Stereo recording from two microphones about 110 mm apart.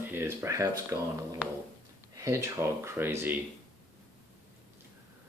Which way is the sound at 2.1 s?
30° right (ahead or behind).